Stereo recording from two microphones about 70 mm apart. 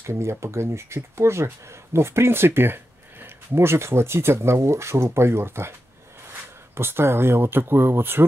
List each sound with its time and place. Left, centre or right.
0.0 s speech: right
6.8 s speech: right